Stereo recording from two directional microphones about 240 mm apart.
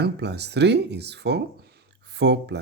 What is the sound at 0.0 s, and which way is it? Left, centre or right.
Speech, right.